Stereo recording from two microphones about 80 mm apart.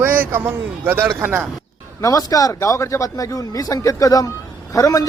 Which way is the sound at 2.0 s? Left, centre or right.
Left.